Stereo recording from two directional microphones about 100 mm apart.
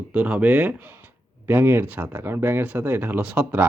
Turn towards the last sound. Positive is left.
turn(degrees=-20)  # may be behind; listen again after turning